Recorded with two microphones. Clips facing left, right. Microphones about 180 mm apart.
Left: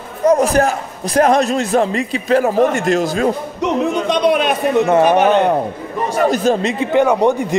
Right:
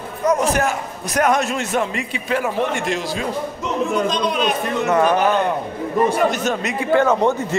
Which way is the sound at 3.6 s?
65° left (ahead or behind).